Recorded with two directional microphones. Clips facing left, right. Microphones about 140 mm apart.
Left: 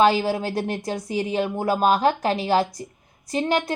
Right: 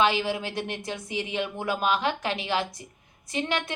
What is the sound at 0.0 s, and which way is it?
A woman's voice, 40° left (ahead or behind).